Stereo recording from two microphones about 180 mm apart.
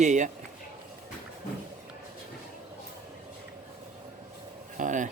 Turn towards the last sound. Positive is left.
turn(degrees=-45)  # may be behind; listen again after turning